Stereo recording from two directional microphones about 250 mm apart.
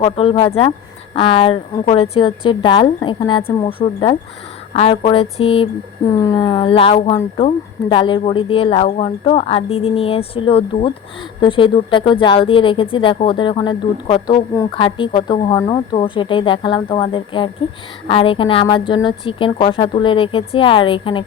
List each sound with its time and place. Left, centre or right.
0.0 s speech: left